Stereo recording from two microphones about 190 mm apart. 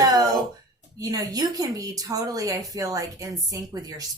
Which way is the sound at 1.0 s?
20° right (ahead or behind).